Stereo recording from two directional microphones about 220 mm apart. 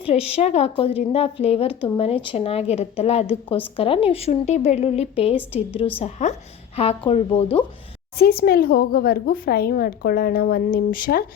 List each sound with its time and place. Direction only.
0.0 s a woman's voice: 30° left (ahead or behind)
8.2 s a woman's voice: 45° left (ahead or behind)